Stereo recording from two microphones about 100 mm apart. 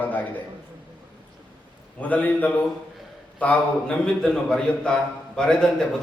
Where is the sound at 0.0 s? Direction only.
15° left (ahead or behind).